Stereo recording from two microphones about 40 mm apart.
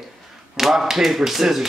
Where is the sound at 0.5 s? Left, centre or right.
Centre.